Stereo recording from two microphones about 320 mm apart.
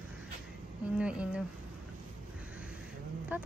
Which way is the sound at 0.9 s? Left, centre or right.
Centre.